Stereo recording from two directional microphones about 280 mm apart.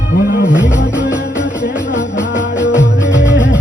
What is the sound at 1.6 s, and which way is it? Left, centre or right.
Music, left.